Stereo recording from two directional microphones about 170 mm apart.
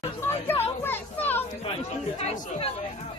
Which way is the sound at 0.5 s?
15° left (ahead or behind).